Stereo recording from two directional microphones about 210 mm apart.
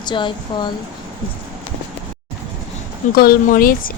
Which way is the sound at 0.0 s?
20° left (ahead or behind).